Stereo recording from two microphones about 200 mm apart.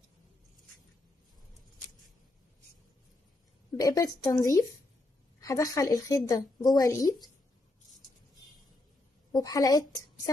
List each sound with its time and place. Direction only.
3.7 s a woman's voice: 15° left (ahead or behind)
9.3 s a woman's voice: 20° left (ahead or behind)